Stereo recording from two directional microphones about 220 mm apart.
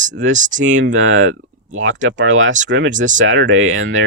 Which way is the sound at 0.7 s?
60° right (ahead or behind).